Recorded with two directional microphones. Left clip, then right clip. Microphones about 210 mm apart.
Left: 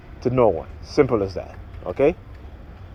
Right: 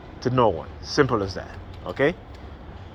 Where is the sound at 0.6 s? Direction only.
40° left (ahead or behind).